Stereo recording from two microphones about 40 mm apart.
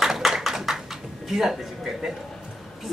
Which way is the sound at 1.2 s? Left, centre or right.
Centre.